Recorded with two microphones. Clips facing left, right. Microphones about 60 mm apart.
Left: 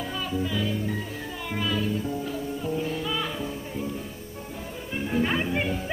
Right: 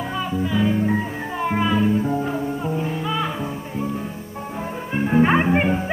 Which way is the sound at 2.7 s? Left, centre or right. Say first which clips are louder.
Right 4 dB; right.